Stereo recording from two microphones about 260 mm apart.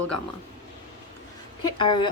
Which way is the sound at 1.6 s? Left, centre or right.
Centre.